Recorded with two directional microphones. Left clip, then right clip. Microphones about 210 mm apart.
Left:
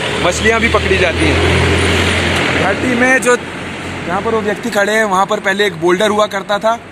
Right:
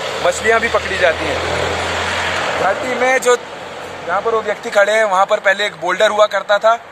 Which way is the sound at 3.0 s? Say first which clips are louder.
Left 2 dB; 40° right (ahead or behind).